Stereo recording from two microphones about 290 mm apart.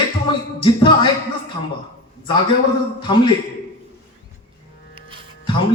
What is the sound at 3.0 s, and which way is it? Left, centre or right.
Speech, centre.